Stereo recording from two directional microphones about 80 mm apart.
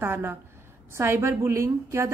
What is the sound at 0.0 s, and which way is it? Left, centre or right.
A woman's voice, right.